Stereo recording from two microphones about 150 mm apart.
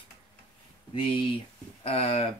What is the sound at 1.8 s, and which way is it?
Speech, 40° left (ahead or behind).